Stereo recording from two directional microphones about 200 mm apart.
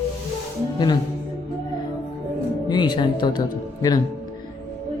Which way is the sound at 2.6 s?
20° left (ahead or behind).